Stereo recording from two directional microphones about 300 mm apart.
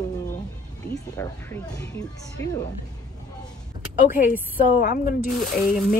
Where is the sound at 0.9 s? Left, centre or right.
Centre.